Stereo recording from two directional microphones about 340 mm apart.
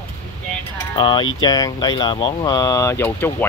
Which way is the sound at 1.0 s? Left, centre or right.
Centre.